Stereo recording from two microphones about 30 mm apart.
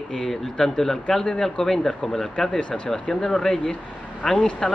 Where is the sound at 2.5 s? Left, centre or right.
Left.